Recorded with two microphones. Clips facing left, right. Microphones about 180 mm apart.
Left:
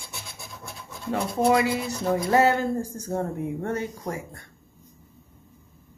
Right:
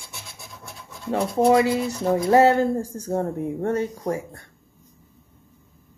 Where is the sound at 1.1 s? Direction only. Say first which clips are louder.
Right 4 dB; 30° right (ahead or behind).